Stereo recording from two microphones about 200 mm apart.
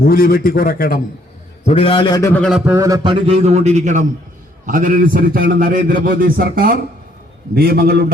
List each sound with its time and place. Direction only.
0.0 s a man's voice: 45° left (ahead or behind)
1.6 s a man's voice: 30° left (ahead or behind)
2.3 s a man's voice: 5° left (ahead or behind)
2.6 s a man's voice: 15° right (ahead or behind); by 8.0 s 50° right (ahead or behind)